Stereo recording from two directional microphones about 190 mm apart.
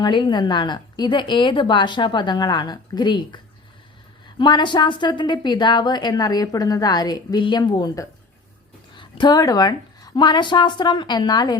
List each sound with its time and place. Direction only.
0.0 s a woman's voice: 25° left (ahead or behind)